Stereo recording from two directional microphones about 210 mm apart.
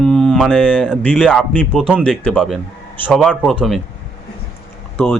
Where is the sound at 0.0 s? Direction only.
Centre (ahead or behind).